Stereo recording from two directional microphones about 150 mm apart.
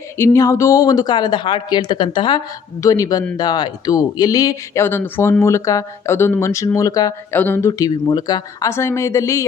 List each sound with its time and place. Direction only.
0.2 s speech: 20° left (ahead or behind)
2.8 s speech: 20° left (ahead or behind)
7.7 s speech: 25° left (ahead or behind)